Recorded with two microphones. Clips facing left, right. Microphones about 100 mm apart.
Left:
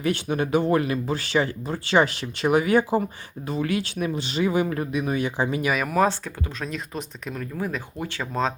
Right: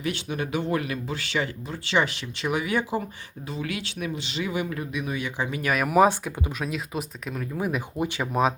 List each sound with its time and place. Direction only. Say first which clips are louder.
0.0 s speech: left 5 dB; 40° left (ahead or behind)
5.6 s speech: right 4 dB; 5° right (ahead or behind)
7.6 s speech: right 4 dB; 15° right (ahead or behind)